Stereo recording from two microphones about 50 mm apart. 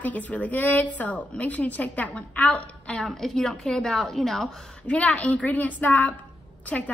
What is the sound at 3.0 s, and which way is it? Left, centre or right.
A woman's voice, centre.